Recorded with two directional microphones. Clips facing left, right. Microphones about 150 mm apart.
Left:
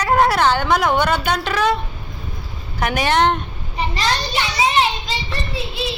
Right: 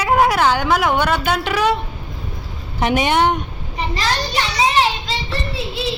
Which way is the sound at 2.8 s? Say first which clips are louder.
Right 3 dB; 25° right (ahead or behind).